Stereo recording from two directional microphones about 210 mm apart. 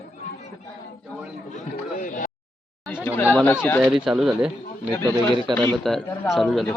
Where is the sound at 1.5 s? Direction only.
40° left (ahead or behind).